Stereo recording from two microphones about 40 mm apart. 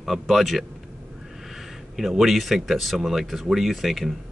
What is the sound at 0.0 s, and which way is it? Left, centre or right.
Speech, centre.